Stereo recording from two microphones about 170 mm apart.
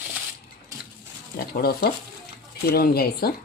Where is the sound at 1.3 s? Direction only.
65° left (ahead or behind).